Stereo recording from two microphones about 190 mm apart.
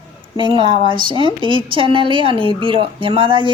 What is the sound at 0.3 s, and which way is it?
Speech, 25° right (ahead or behind).